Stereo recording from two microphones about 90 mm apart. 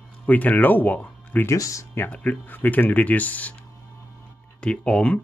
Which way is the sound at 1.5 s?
35° left (ahead or behind).